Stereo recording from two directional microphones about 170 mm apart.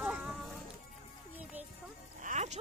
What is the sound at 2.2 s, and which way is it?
Music, 45° right (ahead or behind).